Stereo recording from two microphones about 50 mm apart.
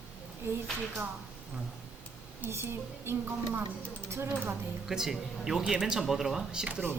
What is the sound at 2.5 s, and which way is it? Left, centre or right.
Speech, right.